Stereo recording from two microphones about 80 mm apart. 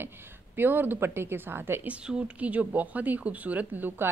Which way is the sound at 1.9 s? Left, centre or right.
Centre.